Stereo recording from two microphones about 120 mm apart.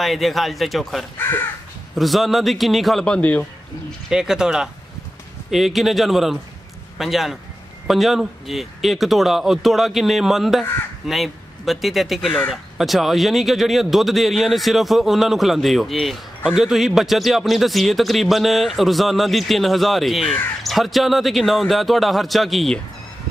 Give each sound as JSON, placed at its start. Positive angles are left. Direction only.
{"t": 0.0, "sound": "speech", "side_deg": 0}
{"t": 1.1, "sound": "speech", "side_deg": 20}
{"t": 2.0, "sound": "speech", "side_deg": 0}
{"t": 4.1, "sound": "speech", "side_deg": -5}